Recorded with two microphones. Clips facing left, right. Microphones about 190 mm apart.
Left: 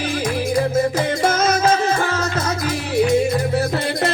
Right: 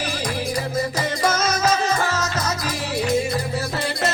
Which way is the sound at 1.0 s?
55° left (ahead or behind).